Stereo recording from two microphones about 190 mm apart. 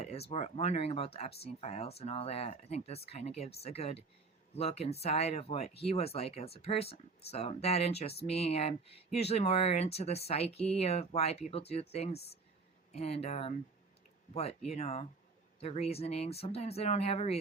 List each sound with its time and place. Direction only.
0.0 s speech: 30° left (ahead or behind)